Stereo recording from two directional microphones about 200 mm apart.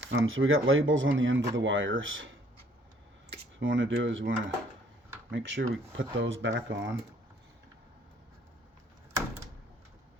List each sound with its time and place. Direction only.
0.3 s speech: 80° right
3.3 s speech: 70° right (ahead or behind)